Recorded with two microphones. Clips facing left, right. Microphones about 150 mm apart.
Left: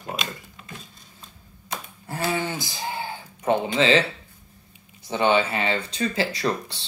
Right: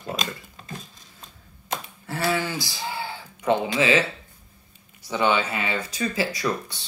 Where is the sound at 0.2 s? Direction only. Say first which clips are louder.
Right 1 dB; 35° right (ahead or behind).